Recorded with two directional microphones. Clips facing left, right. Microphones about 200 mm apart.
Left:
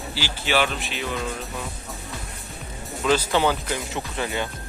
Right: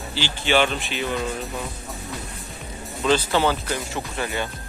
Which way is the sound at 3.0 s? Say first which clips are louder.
Right 1 dB; 10° left (ahead or behind).